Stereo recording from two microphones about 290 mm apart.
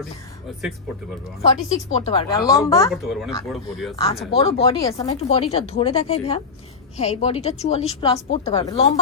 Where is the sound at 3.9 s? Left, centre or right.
Centre.